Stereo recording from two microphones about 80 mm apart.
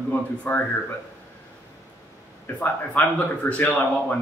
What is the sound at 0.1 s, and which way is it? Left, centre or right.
Speech, left.